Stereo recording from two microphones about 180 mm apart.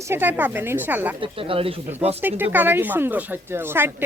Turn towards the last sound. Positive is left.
turn(degrees=-10)  # may be behind; listen again after turning